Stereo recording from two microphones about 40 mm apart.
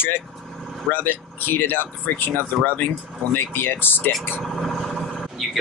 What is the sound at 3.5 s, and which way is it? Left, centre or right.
Speech, left.